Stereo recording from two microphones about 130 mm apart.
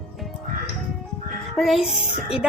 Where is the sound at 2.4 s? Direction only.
10° right (ahead or behind).